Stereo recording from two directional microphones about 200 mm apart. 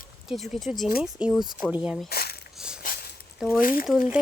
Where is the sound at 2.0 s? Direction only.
50° left (ahead or behind).